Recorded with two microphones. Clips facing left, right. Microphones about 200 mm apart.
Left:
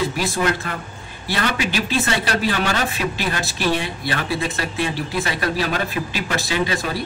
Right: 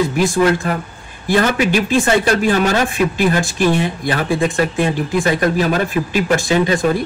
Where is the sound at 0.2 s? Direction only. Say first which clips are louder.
Right 7 dB; 50° right (ahead or behind).